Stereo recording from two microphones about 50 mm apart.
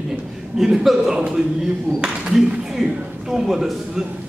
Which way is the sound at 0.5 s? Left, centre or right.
Centre.